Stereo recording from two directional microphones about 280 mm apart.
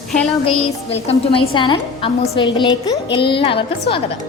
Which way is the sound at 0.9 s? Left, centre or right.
Centre.